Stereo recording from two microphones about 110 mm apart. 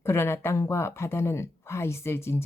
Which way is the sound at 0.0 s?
20° left (ahead or behind).